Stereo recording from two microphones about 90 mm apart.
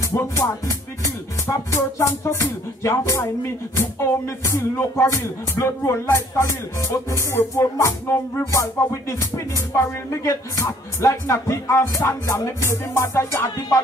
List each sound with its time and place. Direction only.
0.1 s speech: 30° left (ahead or behind)
9.8 s speech: 30° left (ahead or behind)